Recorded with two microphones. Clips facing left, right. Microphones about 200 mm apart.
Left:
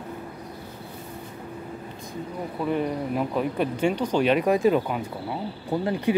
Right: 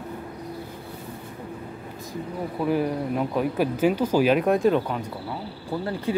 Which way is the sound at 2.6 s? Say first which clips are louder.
Right 2 dB; 5° right (ahead or behind).